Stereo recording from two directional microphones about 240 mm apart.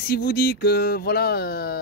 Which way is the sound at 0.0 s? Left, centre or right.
Left.